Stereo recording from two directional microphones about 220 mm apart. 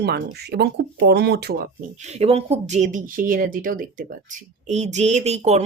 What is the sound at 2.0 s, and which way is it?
Speech, 30° right (ahead or behind).